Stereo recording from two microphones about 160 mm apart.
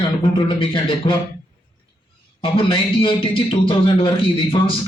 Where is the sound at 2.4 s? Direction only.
30° left (ahead or behind).